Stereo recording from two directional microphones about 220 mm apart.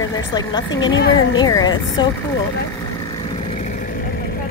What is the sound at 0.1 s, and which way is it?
Speech, 20° left (ahead or behind).